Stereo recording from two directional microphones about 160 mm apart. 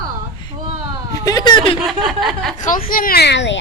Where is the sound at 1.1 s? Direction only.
20° left (ahead or behind).